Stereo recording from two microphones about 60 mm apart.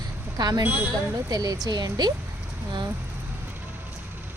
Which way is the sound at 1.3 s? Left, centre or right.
Right.